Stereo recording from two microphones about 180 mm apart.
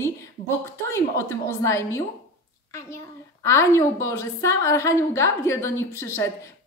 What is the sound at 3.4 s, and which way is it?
A woman's voice, 15° left (ahead or behind).